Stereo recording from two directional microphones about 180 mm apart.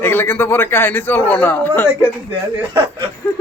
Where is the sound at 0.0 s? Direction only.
10° left (ahead or behind).